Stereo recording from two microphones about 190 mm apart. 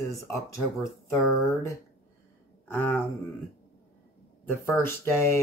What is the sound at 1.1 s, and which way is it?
Speech, 15° left (ahead or behind).